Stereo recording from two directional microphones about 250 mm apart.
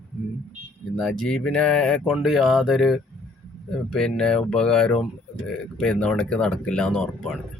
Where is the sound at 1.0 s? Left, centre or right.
Centre.